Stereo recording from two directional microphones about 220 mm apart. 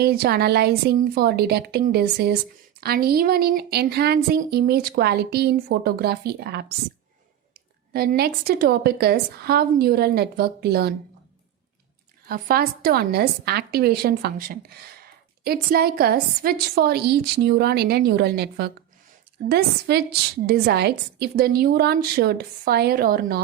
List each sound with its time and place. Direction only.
0.0 s speech: 45° right (ahead or behind)
12.3 s speech: 40° right (ahead or behind)